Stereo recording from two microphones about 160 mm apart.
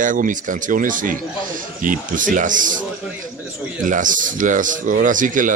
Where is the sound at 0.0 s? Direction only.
55° right (ahead or behind).